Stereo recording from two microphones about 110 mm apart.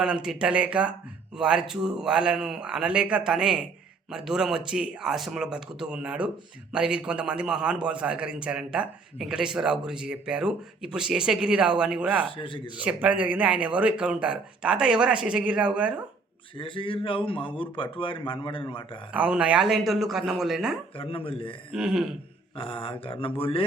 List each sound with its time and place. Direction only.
0.0 s a man's voice: 5° right (ahead or behind)
12.2 s speech: 50° left (ahead or behind)
12.8 s a man's voice: 10° right (ahead or behind)
16.6 s speech: 50° left (ahead or behind)
19.1 s speech: 10° right (ahead or behind)
20.9 s speech: 60° left (ahead or behind)
21.8 s speech: 5° right (ahead or behind)
22.5 s speech: 55° left (ahead or behind)